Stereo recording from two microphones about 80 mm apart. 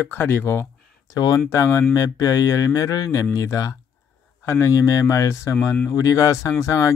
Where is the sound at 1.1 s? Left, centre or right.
Left.